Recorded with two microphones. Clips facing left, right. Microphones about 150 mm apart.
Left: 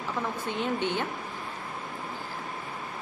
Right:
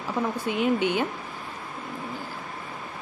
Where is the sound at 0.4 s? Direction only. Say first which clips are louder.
Right 7 dB; 10° right (ahead or behind).